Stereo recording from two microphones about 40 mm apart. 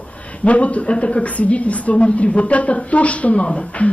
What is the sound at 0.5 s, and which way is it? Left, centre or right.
A woman's voice, left.